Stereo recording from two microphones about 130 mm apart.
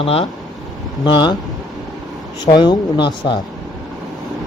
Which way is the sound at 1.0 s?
35° left (ahead or behind).